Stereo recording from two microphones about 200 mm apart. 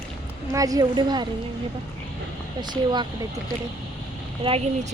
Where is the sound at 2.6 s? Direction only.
20° right (ahead or behind).